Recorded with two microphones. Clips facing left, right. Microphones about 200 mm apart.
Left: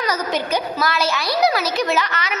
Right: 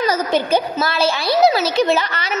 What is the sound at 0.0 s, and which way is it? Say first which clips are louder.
A child's voice: right 4 dB; 30° right (ahead or behind).